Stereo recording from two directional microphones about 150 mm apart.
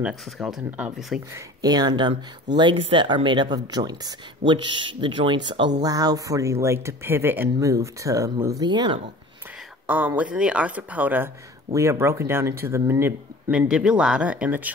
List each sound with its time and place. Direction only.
0.0 s speech: centre (ahead or behind)
1.3 s speech: 25° right (ahead or behind)
9.8 s speech: 10° right (ahead or behind)